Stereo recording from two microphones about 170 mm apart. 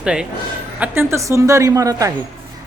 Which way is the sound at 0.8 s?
15° right (ahead or behind).